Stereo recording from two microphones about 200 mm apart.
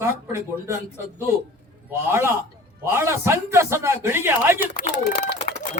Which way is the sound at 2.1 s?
10° right (ahead or behind).